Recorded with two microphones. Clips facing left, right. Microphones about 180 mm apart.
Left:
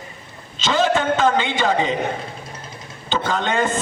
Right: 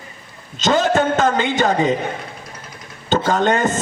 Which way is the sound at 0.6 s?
45° right (ahead or behind).